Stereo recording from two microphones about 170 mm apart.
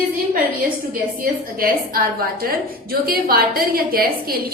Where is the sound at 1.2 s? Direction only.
60° right (ahead or behind).